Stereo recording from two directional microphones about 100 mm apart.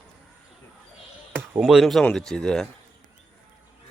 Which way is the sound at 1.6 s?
5° right (ahead or behind).